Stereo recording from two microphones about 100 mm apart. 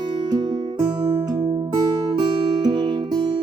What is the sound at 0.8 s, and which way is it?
Music, 45° right (ahead or behind).